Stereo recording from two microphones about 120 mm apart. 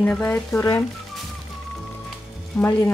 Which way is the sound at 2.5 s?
10° left (ahead or behind).